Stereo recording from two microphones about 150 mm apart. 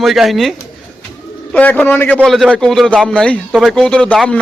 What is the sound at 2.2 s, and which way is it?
A man's voice, centre (ahead or behind).